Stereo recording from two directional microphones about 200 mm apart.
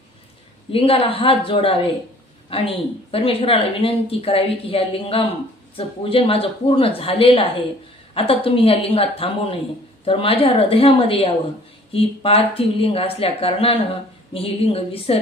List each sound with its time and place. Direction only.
0.7 s speech: 30° left (ahead or behind)